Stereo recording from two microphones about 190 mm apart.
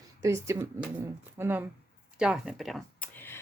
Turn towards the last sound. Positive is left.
turn(degrees=0)  # may be behind; listen again after turning